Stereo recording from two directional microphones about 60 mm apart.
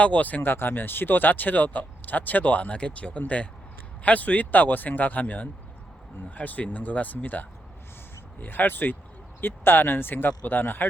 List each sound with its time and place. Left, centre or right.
0.0 s speech: left